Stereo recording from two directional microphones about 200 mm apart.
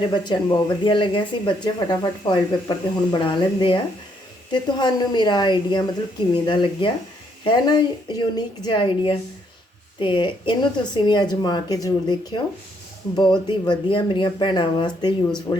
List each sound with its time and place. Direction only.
0.0 s speech: 20° left (ahead or behind)